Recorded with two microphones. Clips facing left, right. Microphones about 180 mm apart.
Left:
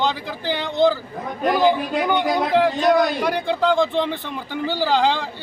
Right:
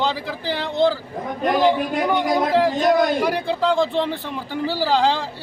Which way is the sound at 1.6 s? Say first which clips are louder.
Even; centre (ahead or behind).